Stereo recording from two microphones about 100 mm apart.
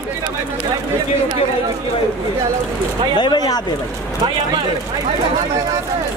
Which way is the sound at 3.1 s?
45° left (ahead or behind).